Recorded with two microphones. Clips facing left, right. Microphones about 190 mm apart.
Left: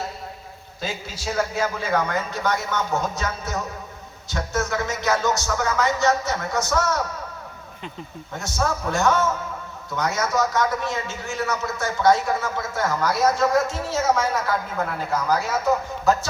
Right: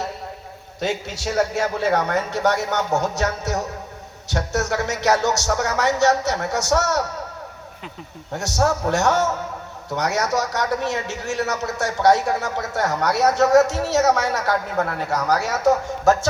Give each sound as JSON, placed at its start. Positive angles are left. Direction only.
{"t": 0.8, "sound": "speech", "side_deg": -70}
{"t": 8.3, "sound": "speech", "side_deg": -70}